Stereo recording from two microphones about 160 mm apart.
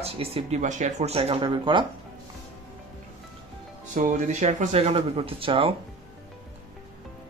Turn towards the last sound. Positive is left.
turn(degrees=-35)  # may be behind; listen again after turning